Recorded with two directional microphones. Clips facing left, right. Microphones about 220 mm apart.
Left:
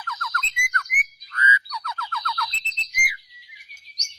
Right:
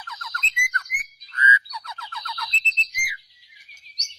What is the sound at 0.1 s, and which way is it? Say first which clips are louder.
Bird: left 8 dB; 20° right (ahead or behind).